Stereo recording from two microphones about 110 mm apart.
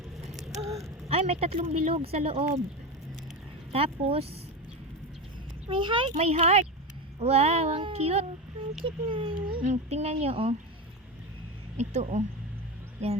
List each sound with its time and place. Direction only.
0.3 s a sound: centre (ahead or behind)
0.7 s a sound: 30° right (ahead or behind)
1.0 s speech: 70° right (ahead or behind)
3.7 s speech: 60° right (ahead or behind)
5.6 s speech: 50° right (ahead or behind)
6.1 s a woman's voice: 65° right (ahead or behind)
7.8 s a woman's voice: 60° right (ahead or behind)
8.8 s speech: 50° right (ahead or behind)
9.6 s a woman's voice: 80° right; by 10.5 s 60° right (ahead or behind)
11.8 s speech: 90° right